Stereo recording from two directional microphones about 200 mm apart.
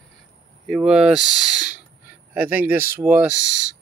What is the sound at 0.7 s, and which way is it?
Speech, 5° right (ahead or behind).